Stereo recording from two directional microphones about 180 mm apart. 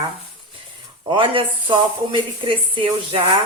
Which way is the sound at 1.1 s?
30° right (ahead or behind).